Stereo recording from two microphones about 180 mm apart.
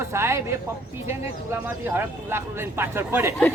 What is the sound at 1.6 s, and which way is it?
Speech, 10° right (ahead or behind).